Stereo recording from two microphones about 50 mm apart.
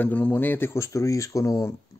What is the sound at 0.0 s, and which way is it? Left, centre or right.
Speech, left.